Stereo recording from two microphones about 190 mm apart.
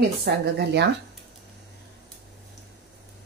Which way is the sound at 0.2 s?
60° right (ahead or behind).